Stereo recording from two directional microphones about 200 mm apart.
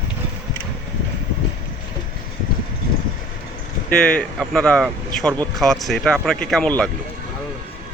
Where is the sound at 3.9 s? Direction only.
5° left (ahead or behind).